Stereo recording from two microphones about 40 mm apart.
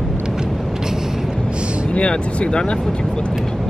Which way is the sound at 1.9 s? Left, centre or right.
Left.